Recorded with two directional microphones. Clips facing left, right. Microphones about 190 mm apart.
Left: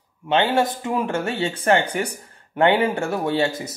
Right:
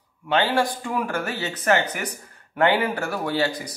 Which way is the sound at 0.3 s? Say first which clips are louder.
Left 2 dB; 25° left (ahead or behind).